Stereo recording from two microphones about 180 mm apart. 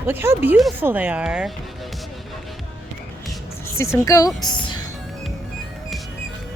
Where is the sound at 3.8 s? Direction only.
15° left (ahead or behind).